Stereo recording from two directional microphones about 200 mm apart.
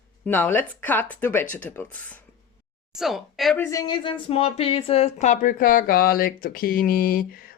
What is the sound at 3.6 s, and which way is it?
Speech, 15° left (ahead or behind).